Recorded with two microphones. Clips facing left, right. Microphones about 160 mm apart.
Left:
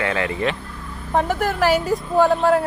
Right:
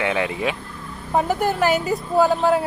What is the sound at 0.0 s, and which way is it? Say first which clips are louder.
Speech: even; 15° right (ahead or behind).